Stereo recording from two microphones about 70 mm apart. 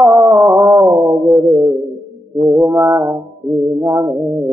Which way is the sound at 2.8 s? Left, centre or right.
Right.